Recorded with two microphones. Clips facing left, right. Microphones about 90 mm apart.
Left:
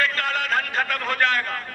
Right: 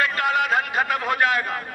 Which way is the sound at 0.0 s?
15° right (ahead or behind).